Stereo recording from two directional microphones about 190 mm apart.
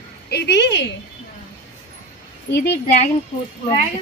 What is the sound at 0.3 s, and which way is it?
Speech, 60° left (ahead or behind).